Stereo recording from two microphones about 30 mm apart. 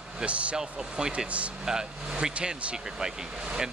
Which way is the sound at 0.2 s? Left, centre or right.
Right.